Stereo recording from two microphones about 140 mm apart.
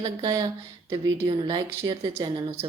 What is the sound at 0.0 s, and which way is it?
Speech, 25° right (ahead or behind).